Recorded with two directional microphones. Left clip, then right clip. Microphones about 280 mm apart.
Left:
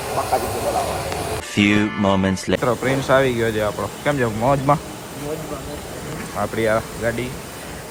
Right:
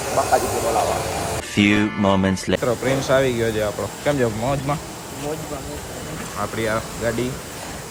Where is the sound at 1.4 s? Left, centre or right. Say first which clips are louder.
Left 1 dB; centre.